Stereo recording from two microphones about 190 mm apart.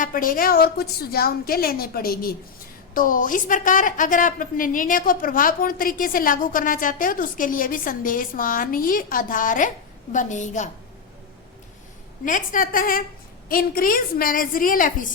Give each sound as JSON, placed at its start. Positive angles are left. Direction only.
{"t": 0.0, "sound": "a woman's voice", "side_deg": 45}
{"t": 12.2, "sound": "a woman's voice", "side_deg": 45}